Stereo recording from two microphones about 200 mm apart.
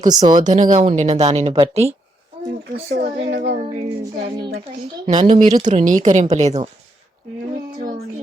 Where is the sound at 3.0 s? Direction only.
45° right (ahead or behind).